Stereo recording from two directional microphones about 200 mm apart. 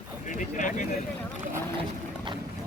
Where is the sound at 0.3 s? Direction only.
40° left (ahead or behind).